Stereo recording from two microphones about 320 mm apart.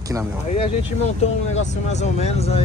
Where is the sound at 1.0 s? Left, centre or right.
Left.